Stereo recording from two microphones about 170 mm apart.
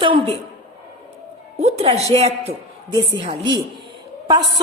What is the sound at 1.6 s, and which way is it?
A woman's voice, 40° right (ahead or behind).